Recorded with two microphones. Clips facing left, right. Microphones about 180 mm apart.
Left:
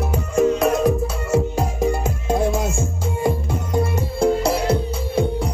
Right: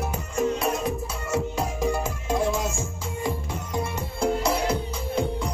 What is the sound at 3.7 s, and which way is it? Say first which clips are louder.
Music: left 8 dB; 30° left (ahead or behind).